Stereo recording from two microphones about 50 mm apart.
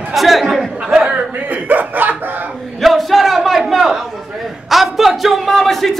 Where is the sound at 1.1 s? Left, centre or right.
Right.